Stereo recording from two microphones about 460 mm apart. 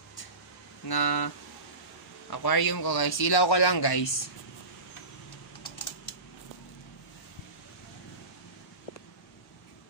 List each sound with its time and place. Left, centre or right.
0.8 s speech: left
2.3 s speech: left